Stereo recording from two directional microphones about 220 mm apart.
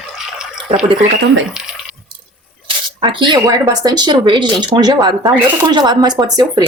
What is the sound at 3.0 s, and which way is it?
Speech, 20° right (ahead or behind).